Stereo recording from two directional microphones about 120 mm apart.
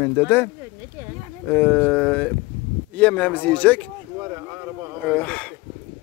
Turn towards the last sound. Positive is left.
turn(degrees=10)  # may be behind; listen again after turning